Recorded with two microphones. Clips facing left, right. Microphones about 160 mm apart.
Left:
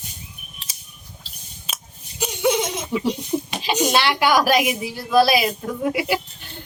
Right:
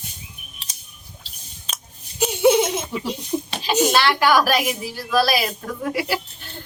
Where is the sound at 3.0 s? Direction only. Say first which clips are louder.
Left 3 dB; 20° left (ahead or behind).